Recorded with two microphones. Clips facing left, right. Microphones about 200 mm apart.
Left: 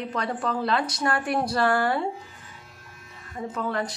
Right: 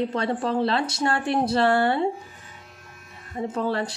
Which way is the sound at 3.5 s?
30° right (ahead or behind).